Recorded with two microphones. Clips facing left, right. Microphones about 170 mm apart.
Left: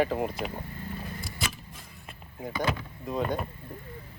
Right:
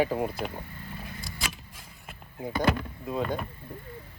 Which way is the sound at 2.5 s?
60° right (ahead or behind).